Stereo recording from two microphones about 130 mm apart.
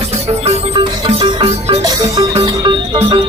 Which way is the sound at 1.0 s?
35° right (ahead or behind).